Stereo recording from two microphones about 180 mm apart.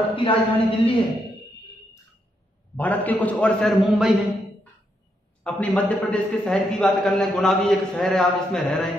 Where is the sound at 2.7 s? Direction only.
10° left (ahead or behind).